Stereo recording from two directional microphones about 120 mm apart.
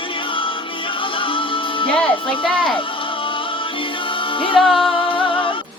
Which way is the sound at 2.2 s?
45° left (ahead or behind).